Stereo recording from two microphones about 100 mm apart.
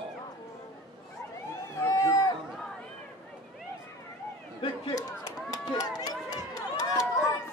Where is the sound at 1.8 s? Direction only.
35° left (ahead or behind).